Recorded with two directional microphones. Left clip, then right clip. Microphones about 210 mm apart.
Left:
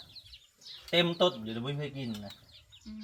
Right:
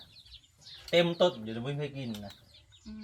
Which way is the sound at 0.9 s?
15° right (ahead or behind).